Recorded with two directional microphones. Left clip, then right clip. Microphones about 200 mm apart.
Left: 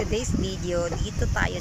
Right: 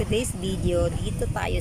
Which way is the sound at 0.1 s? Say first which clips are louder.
Right 1 dB; 10° right (ahead or behind).